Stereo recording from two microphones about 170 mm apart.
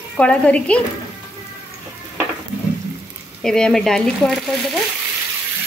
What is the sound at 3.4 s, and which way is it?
Speech, 5° left (ahead or behind).